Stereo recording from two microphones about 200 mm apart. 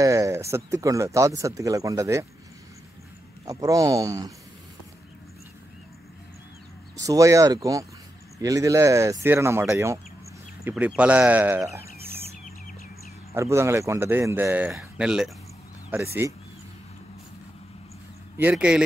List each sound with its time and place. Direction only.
0.0 s speech: 15° right (ahead or behind)
3.4 s speech: 15° right (ahead or behind)
7.0 s speech: 15° right (ahead or behind)
13.3 s speech: 15° right (ahead or behind)
18.4 s speech: 5° right (ahead or behind)